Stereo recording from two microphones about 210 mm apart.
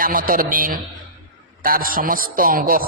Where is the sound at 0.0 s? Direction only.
40° right (ahead or behind).